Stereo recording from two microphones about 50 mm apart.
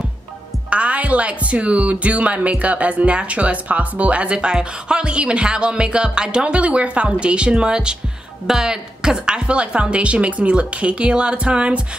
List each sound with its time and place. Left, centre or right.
0.7 s speech: right